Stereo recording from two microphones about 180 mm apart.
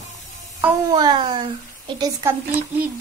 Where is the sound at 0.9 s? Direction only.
25° right (ahead or behind).